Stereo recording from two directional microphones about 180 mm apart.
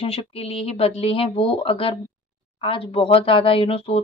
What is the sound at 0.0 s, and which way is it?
Speech, 30° left (ahead or behind).